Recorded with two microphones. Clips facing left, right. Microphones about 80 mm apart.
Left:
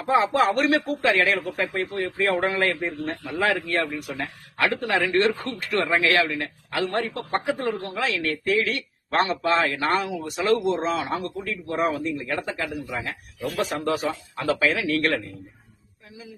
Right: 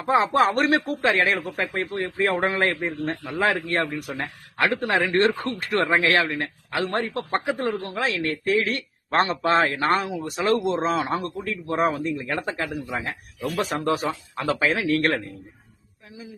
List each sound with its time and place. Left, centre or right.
0.1 s a man's voice: right